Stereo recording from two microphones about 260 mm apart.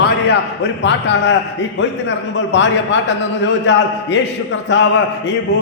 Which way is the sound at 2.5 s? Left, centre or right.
Left.